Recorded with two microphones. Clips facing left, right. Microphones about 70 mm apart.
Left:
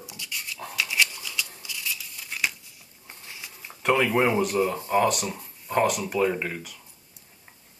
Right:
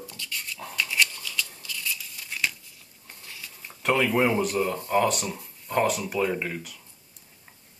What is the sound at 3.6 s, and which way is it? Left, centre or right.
Speech, centre.